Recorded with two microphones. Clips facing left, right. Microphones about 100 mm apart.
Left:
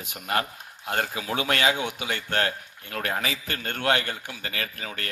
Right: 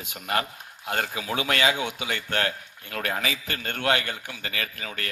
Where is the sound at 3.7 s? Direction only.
45° left (ahead or behind).